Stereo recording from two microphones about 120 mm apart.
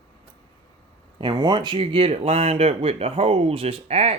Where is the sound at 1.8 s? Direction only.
50° right (ahead or behind).